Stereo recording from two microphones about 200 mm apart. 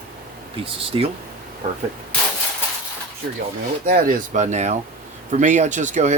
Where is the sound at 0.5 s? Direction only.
25° right (ahead or behind).